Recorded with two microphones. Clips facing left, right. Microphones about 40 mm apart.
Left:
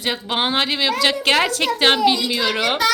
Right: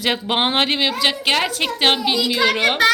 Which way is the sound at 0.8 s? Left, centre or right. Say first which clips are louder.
Left 1 dB; centre.